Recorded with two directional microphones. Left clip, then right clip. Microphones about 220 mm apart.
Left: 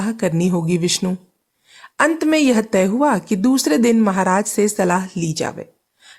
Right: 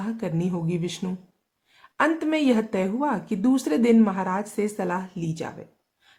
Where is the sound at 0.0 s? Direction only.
30° left (ahead or behind).